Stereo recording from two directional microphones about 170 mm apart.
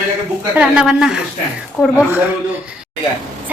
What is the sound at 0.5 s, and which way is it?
Speech, 5° right (ahead or behind).